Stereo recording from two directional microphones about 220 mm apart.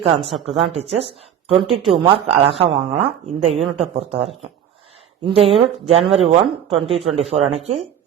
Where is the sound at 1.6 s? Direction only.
Centre (ahead or behind).